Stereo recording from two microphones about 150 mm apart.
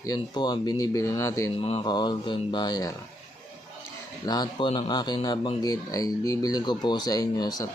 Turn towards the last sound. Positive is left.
turn(degrees=25)  # may be behind; listen again after turning